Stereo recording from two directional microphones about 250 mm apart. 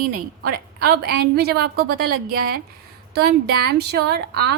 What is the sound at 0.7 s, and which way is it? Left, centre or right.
Speech, right.